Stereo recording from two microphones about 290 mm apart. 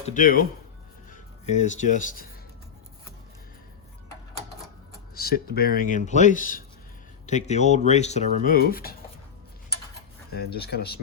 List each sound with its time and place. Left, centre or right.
0.0 s speech: left
5.1 s speech: left
10.3 s speech: left